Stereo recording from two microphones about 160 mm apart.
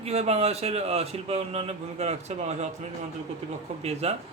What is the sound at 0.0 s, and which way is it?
A man's voice, 40° right (ahead or behind).